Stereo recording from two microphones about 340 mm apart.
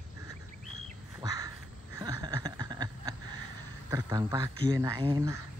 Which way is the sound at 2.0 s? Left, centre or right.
Centre.